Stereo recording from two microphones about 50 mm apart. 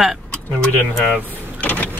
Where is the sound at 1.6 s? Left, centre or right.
Left.